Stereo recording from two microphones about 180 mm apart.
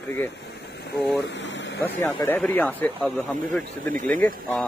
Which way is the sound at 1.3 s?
90° left.